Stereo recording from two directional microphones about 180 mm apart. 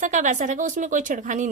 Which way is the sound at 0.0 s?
45° right (ahead or behind).